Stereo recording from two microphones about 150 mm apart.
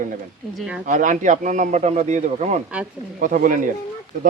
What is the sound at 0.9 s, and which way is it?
Speech, 60° right (ahead or behind).